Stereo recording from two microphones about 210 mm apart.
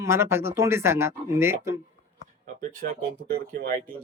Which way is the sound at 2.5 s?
40° right (ahead or behind).